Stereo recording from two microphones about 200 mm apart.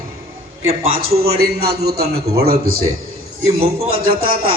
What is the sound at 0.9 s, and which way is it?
A man's voice, 50° right (ahead or behind).